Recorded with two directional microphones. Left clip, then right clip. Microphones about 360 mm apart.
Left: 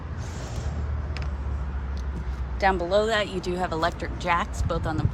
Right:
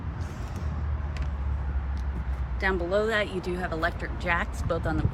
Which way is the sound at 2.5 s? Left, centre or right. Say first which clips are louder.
Left 4 dB; centre.